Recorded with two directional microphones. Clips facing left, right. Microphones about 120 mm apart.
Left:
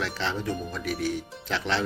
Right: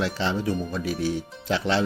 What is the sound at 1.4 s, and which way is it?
Speech, 10° right (ahead or behind).